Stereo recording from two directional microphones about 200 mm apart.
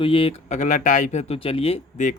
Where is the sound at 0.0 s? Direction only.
30° left (ahead or behind).